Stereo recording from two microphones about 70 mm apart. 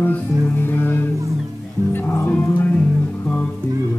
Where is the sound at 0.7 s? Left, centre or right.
Left.